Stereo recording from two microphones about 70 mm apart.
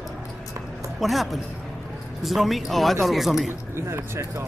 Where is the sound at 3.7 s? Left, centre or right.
Right.